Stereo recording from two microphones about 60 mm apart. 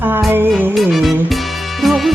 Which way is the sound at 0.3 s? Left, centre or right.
Right.